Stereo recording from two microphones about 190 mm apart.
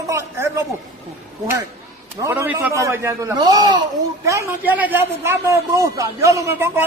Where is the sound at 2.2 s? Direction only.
10° right (ahead or behind).